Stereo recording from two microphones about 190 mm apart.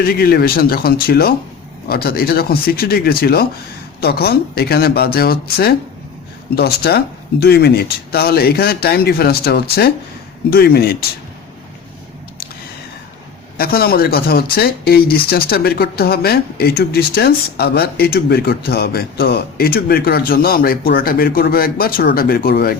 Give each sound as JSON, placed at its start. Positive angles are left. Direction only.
{"t": 0.1, "sound": "speech", "side_deg": 55}
{"t": 13.6, "sound": "speech", "side_deg": 50}